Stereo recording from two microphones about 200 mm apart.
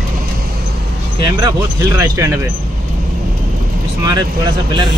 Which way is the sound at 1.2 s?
20° right (ahead or behind).